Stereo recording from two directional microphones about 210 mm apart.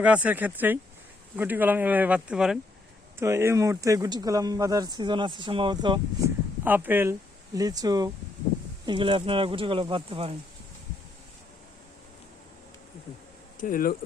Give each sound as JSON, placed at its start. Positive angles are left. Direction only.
{"t": 0.0, "sound": "speech", "side_deg": -5}
{"t": 6.7, "sound": "speech", "side_deg": -10}
{"t": 13.6, "sound": "speech", "side_deg": 40}